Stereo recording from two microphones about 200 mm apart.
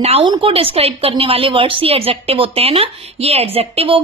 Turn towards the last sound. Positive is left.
turn(degrees=-30)  # may be behind; listen again after turning